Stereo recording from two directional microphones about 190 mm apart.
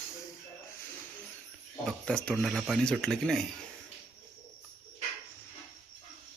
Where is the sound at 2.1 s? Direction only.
5° left (ahead or behind).